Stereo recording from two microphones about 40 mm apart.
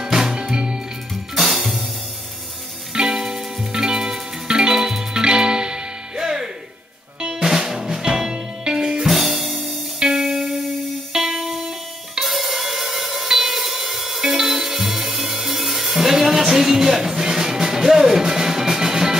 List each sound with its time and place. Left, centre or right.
0.0 s music: centre
1.3 s music: centre
2.9 s music: centre
9.9 s music: centre